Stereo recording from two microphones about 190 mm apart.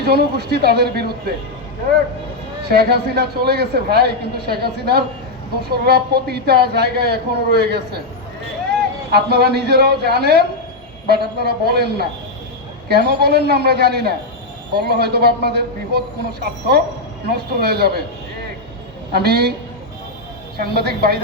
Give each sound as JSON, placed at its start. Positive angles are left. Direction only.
{"t": 0.0, "sound": "a man's voice", "side_deg": -60}
{"t": 2.6, "sound": "a man's voice", "side_deg": -55}
{"t": 9.1, "sound": "a man's voice", "side_deg": -60}
{"t": 19.1, "sound": "a man's voice", "side_deg": -55}
{"t": 20.6, "sound": "a man's voice", "side_deg": -55}